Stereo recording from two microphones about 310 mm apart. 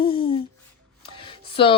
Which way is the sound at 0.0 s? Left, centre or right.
Centre.